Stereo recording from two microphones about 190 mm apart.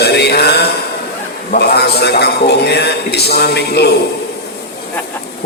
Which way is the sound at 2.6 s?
60° left (ahead or behind).